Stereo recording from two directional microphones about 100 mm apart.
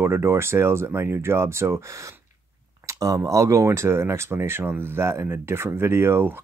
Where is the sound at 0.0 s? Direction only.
25° right (ahead or behind).